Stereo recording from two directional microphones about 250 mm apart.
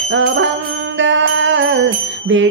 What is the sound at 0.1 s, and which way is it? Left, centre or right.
Music, right.